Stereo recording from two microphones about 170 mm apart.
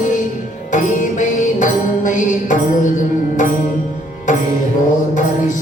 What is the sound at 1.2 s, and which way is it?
Mantra, 50° left (ahead or behind).